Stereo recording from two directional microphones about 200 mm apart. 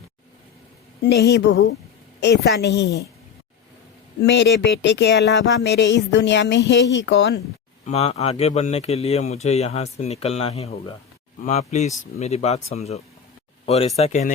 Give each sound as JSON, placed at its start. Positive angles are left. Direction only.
{"t": 1.0, "sound": "speech", "side_deg": 55}
{"t": 4.2, "sound": "speech", "side_deg": 60}
{"t": 7.9, "sound": "speech", "side_deg": 30}